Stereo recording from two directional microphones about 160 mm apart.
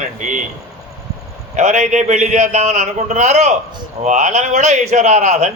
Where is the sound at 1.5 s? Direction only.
45° right (ahead or behind).